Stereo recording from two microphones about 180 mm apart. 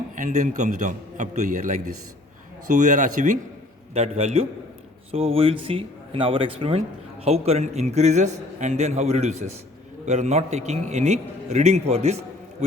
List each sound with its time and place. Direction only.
0.2 s a man's voice: 45° right (ahead or behind)